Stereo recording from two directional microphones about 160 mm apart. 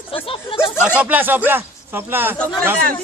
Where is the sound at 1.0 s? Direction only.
10° right (ahead or behind).